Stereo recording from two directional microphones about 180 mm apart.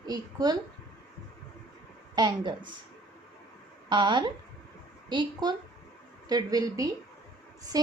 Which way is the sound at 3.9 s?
25° right (ahead or behind).